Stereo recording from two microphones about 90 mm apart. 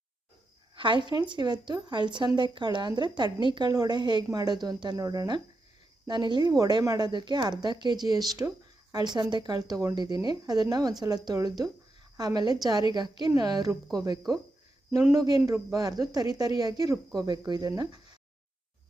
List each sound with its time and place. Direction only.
0.8 s speech: 65° right (ahead or behind); by 5.4 s 45° right (ahead or behind)
6.1 s speech: 55° right (ahead or behind)
7.1 s a woman's voice: 55° right (ahead or behind)